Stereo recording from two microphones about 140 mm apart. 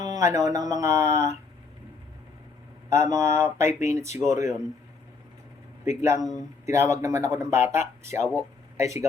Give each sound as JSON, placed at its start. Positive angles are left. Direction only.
{"t": 0.0, "sound": "a sound", "side_deg": -25}
{"t": 0.5, "sound": "a man's voice", "side_deg": -25}
{"t": 2.9, "sound": "a man's voice", "side_deg": -20}
{"t": 3.7, "sound": "speech", "side_deg": 55}
{"t": 4.3, "sound": "a man's voice", "side_deg": -20}
{"t": 6.0, "sound": "a man's voice", "side_deg": -20}